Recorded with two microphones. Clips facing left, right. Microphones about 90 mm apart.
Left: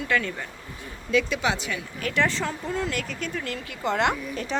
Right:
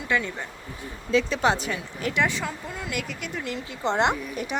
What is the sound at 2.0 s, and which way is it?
Speech, 15° right (ahead or behind).